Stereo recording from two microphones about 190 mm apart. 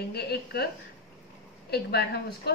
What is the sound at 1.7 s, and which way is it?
Speech, 55° left (ahead or behind).